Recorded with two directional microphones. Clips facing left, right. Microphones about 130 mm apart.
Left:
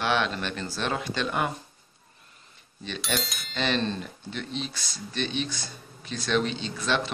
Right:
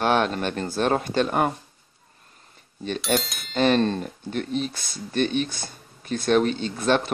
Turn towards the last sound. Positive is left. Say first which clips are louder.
# right 6 dB
turn(degrees=-50)  # may be behind; listen again after turning